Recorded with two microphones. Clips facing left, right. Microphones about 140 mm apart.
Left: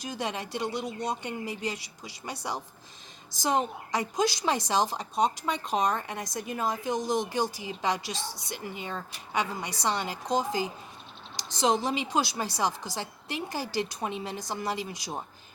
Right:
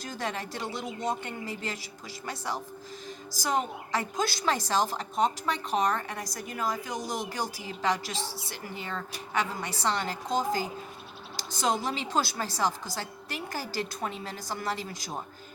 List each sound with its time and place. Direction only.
0.0 s a woman's voice: 15° left (ahead or behind)